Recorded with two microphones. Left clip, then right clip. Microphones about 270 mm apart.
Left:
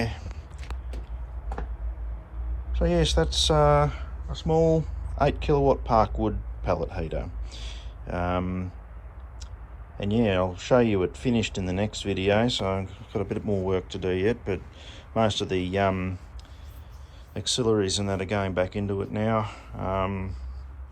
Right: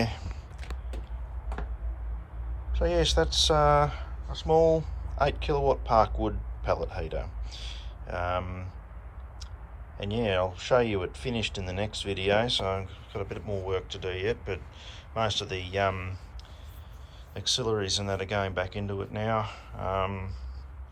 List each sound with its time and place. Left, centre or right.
2.7 s a man's voice: centre
10.0 s speech: centre
17.3 s speech: centre